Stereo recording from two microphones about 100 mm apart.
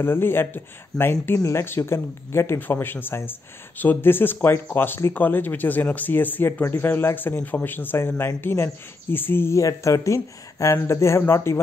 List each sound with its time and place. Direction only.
0.0 s speech: 20° left (ahead or behind)